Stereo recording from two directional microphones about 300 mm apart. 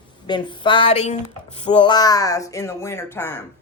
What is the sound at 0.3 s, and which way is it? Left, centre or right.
Speech, centre.